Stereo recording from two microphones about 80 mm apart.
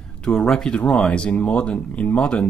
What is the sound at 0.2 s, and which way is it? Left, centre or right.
Speech, centre.